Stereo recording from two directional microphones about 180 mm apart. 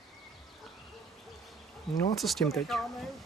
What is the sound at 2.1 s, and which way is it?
Speech, centre (ahead or behind).